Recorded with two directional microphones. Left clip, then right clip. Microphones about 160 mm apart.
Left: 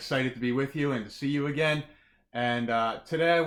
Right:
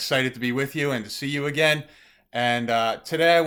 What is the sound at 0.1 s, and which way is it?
Speech, 20° right (ahead or behind).